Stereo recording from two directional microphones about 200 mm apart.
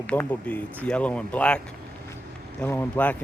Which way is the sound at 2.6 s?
10° left (ahead or behind).